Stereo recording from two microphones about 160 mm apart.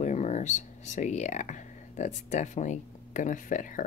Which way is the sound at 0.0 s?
45° left (ahead or behind).